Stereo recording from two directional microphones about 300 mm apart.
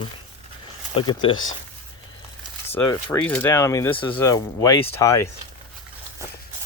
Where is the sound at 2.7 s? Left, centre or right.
Centre.